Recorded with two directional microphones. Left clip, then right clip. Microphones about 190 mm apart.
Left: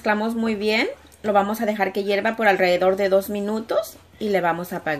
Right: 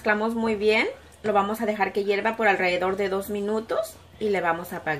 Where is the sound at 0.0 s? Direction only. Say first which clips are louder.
Left 1 dB; 50° left (ahead or behind).